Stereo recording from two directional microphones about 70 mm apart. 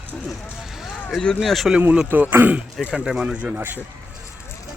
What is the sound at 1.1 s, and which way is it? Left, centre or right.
Speech, centre.